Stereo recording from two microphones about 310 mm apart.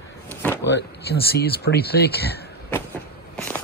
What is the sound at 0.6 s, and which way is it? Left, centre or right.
Speech, left.